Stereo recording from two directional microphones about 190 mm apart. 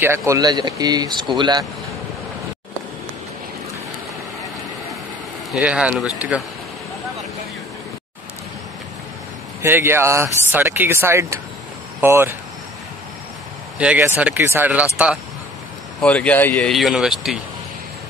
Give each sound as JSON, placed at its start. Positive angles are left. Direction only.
{"t": 0.0, "sound": "speech", "side_deg": -15}
{"t": 5.5, "sound": "speech", "side_deg": -5}
{"t": 9.6, "sound": "speech", "side_deg": -10}
{"t": 13.7, "sound": "speech", "side_deg": -5}
{"t": 16.0, "sound": "speech", "side_deg": 5}